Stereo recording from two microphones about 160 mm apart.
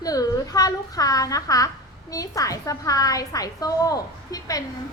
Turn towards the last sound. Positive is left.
turn(degrees=20)  # may be behind; listen again after turning